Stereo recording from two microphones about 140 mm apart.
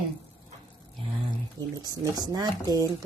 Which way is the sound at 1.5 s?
30° right (ahead or behind).